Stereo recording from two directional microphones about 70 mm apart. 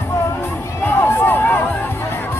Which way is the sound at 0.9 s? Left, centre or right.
Left.